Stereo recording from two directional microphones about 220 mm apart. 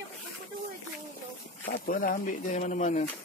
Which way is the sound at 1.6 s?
45° left (ahead or behind).